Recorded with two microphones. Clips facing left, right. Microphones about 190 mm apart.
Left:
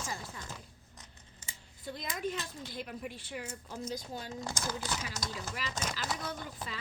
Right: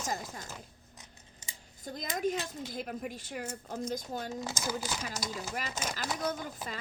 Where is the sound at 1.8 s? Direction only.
45° right (ahead or behind).